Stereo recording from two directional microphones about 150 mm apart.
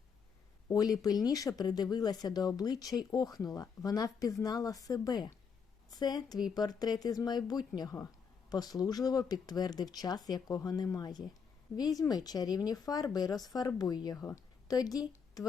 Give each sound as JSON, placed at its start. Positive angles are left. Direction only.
{"t": 0.7, "sound": "speech", "side_deg": 25}